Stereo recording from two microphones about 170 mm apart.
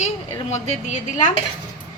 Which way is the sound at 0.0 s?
40° left (ahead or behind).